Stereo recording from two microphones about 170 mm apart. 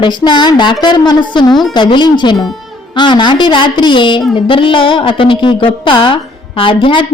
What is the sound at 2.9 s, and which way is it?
A woman's voice, 25° left (ahead or behind).